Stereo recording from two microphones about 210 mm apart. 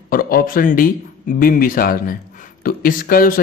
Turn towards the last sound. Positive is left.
turn(degrees=45)  # may be behind; listen again after turning